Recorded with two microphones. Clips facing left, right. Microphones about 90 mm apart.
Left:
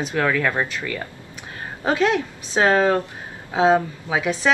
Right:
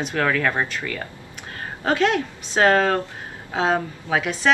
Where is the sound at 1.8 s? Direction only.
20° left (ahead or behind).